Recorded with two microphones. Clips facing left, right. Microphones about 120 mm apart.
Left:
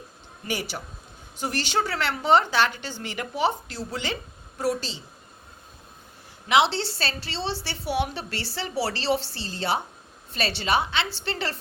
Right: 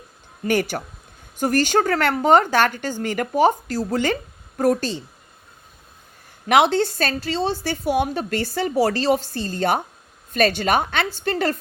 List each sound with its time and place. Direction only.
0.4 s a woman's voice: 50° right (ahead or behind)
6.5 s a woman's voice: 50° right (ahead or behind)